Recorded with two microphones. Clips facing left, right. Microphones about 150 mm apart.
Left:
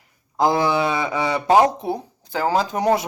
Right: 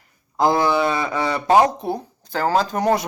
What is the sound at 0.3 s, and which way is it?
Speech, 10° left (ahead or behind).